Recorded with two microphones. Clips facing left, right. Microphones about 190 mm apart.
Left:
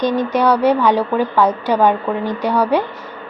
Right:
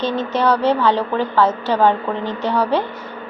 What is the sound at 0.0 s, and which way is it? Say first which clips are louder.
A woman's voice: left 3 dB; 15° left (ahead or behind).